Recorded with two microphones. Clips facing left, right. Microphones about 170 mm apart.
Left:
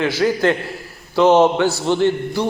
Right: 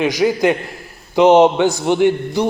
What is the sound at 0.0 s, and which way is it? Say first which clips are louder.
A man's voice: right 2 dB; 15° right (ahead or behind).